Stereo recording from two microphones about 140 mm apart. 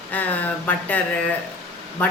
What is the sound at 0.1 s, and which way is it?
A woman's voice, 10° left (ahead or behind).